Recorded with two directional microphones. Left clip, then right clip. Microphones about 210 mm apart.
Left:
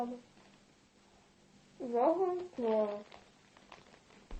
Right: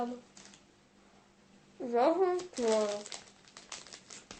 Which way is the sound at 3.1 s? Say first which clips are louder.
Right 9 dB; 15° right (ahead or behind).